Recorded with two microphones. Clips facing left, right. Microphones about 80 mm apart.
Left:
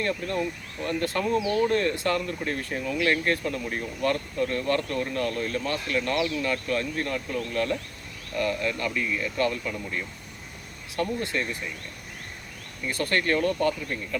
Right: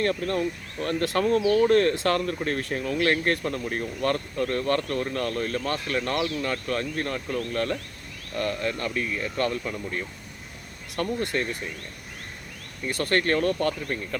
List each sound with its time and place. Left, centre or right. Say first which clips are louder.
0.9 s speech: right 3 dB; right
1.4 s speech: right 4 dB; left
1.6 s speech: right 4 dB; right
10.9 s speech: right 1 dB; right
13.0 s speech: right 1 dB; right